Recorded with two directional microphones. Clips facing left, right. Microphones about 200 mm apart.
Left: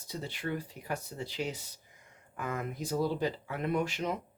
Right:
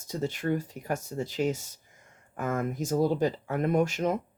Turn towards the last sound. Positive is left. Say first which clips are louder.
# right 6 dB
turn(degrees=-45)  # may be behind; listen again after turning